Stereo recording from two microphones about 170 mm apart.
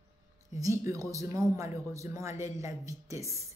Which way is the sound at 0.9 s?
20° right (ahead or behind).